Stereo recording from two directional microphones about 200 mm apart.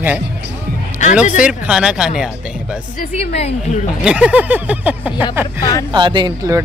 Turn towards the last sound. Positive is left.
turn(degrees=-20)  # may be behind; listen again after turning